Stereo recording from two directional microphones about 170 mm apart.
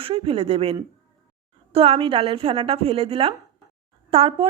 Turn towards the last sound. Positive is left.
turn(degrees=-35)  # may be behind; listen again after turning